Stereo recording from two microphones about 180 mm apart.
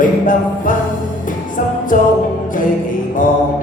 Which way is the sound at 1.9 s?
50° left (ahead or behind).